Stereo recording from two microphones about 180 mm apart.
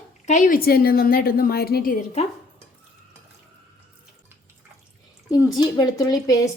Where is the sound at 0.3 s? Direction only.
45° left (ahead or behind).